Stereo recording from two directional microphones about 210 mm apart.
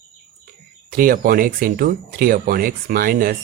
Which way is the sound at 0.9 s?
45° right (ahead or behind).